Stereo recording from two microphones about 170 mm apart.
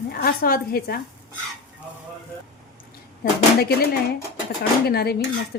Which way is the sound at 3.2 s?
65° left (ahead or behind).